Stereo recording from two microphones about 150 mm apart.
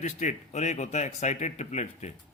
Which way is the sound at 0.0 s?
55° left (ahead or behind).